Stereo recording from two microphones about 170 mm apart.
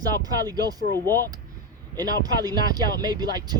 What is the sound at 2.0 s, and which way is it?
Speech, 25° right (ahead or behind).